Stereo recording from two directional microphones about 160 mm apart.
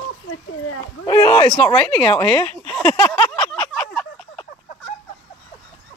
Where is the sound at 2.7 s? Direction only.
10° left (ahead or behind).